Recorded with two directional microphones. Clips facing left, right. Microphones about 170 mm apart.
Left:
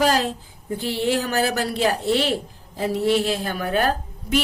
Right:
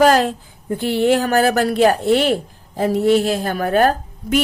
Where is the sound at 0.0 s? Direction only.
55° right (ahead or behind).